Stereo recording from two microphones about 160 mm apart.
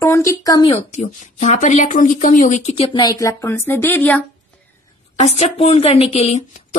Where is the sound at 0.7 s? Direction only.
45° left (ahead or behind).